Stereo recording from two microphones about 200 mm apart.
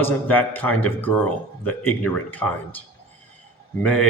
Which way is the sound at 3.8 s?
5° left (ahead or behind).